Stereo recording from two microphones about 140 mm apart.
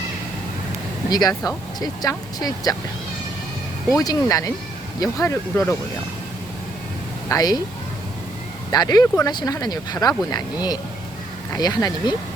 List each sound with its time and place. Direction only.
1.1 s speech: 30° left (ahead or behind)
3.9 s speech: 25° left (ahead or behind)
7.3 s speech: 25° left (ahead or behind)
8.7 s speech: 30° left (ahead or behind)